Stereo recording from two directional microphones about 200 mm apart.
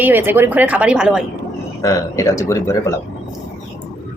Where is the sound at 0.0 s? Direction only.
10° right (ahead or behind).